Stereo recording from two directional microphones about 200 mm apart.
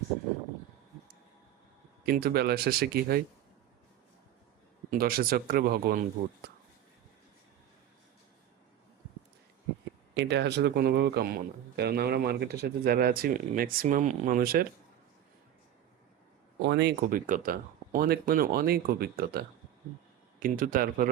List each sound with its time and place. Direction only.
2.0 s speech: 50° right (ahead or behind)
4.9 s speech: 45° right (ahead or behind)
10.2 s speech: 60° right (ahead or behind)
16.6 s speech: 55° right (ahead or behind)